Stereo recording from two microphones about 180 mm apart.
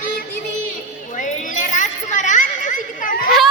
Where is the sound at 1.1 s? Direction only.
45° left (ahead or behind).